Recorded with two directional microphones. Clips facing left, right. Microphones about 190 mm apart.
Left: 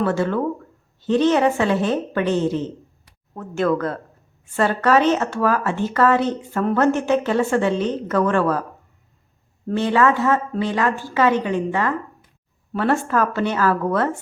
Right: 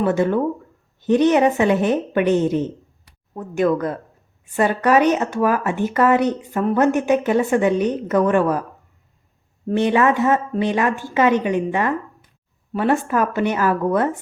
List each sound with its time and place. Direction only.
0.0 s a woman's voice: 20° right (ahead or behind)
9.6 s a woman's voice: 20° right (ahead or behind)